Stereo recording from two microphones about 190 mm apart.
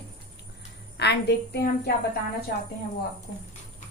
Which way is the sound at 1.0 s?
60° left (ahead or behind).